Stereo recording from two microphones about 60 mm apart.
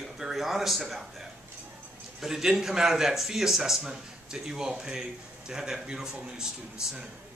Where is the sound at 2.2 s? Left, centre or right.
Centre.